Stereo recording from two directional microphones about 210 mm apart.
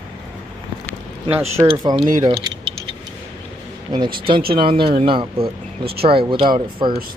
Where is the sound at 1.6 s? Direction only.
20° right (ahead or behind).